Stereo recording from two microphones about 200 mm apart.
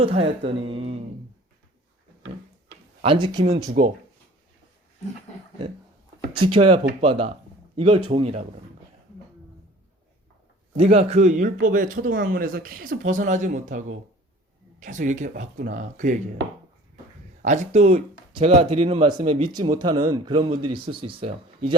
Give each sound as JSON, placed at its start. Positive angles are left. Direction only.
{"t": 0.0, "sound": "speech", "side_deg": -30}
{"t": 3.0, "sound": "speech", "side_deg": -25}
{"t": 6.4, "sound": "speech", "side_deg": -25}
{"t": 10.8, "sound": "speech", "side_deg": -30}
{"t": 17.4, "sound": "speech", "side_deg": -35}
{"t": 19.5, "sound": "speech", "side_deg": -20}